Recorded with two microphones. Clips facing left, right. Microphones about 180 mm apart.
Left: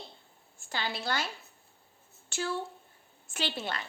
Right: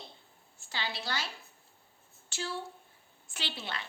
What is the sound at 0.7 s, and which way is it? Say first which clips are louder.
Speech: left 4 dB; 50° left (ahead or behind).